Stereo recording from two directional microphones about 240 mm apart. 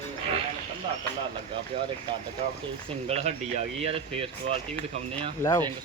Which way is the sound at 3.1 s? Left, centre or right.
Right.